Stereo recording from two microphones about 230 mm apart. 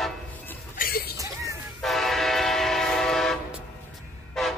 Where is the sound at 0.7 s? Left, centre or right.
Left.